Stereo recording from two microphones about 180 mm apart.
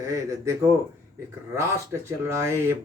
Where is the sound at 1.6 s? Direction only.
15° right (ahead or behind).